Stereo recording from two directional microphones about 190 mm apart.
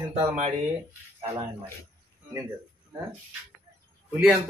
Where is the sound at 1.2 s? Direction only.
25° right (ahead or behind).